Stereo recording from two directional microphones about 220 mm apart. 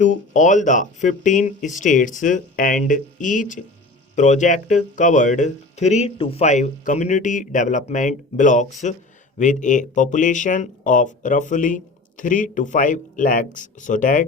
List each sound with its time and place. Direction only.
0.0 s speech: 35° left (ahead or behind)